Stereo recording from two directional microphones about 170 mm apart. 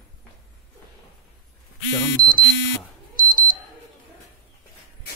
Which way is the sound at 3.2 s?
55° left (ahead or behind).